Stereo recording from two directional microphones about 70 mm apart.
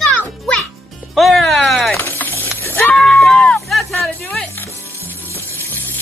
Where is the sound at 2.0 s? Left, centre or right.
Left.